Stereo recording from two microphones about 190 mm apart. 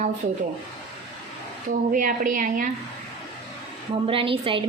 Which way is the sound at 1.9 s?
45° right (ahead or behind).